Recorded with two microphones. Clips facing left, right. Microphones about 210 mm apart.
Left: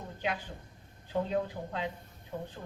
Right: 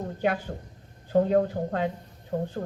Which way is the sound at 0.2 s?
45° right (ahead or behind).